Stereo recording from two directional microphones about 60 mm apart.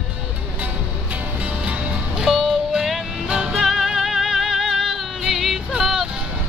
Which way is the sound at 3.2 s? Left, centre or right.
Centre.